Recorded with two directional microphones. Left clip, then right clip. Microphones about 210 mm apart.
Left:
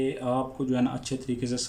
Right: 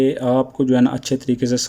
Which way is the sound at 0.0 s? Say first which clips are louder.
Right 10 dB; 50° right (ahead or behind).